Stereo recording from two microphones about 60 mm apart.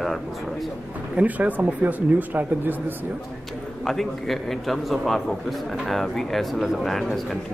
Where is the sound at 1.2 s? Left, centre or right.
Right.